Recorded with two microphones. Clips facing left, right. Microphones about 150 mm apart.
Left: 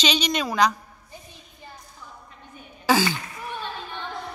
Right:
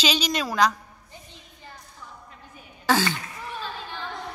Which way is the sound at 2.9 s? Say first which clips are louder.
Left 2 dB; centre (ahead or behind).